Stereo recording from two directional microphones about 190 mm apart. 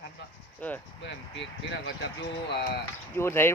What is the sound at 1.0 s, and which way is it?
Speech, 65° left (ahead or behind).